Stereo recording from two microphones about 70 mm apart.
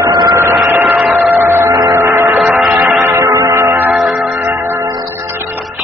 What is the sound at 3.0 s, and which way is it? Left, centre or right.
Music, right.